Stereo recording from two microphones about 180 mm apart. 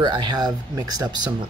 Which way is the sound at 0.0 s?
25° right (ahead or behind).